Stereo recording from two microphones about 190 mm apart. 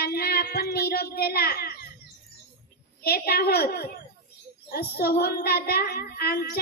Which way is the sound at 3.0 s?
55° left (ahead or behind).